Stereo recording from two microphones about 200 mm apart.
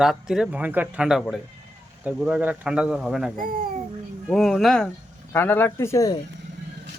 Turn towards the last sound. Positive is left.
turn(degrees=15)  # may be behind; listen again after turning